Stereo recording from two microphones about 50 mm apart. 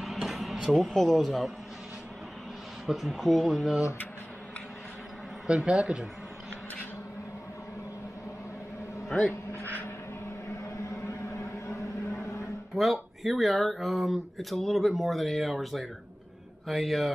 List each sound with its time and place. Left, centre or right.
0.0 s a sound: centre
0.6 s speech: centre
2.9 s speech: centre
5.6 s speech: centre
11.1 s a sound: left
12.7 s speech: centre